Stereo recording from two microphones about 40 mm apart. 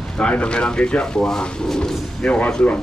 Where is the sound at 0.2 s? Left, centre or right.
Left.